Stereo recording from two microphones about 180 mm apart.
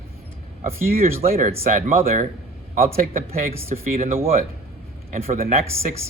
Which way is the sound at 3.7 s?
40° right (ahead or behind).